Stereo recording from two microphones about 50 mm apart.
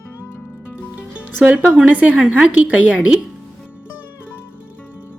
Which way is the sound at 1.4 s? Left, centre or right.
Right.